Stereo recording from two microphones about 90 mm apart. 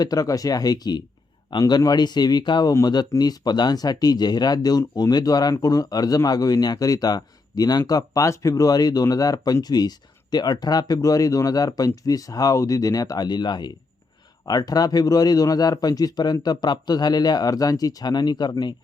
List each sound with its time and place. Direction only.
0.0 s speech: 45° left (ahead or behind)